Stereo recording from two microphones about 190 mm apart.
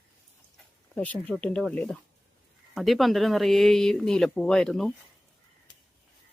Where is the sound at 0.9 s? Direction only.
5° left (ahead or behind).